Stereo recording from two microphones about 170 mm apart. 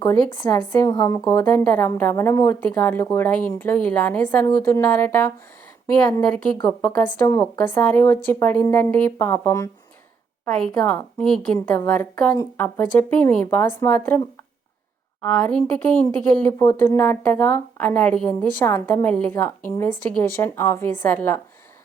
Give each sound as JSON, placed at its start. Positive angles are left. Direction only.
{"t": 0.0, "sound": "speech", "side_deg": 25}
{"t": 1.5, "sound": "speech", "side_deg": 10}
{"t": 6.7, "sound": "speech", "side_deg": 5}
{"t": 7.3, "sound": "speech", "side_deg": 20}
{"t": 7.7, "sound": "speech", "side_deg": 10}
{"t": 10.5, "sound": "speech", "side_deg": 0}
{"t": 15.3, "sound": "speech", "side_deg": 5}